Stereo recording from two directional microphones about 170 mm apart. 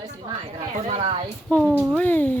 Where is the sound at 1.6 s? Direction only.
10° right (ahead or behind).